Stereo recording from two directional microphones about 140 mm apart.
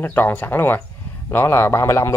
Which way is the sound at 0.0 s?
15° left (ahead or behind).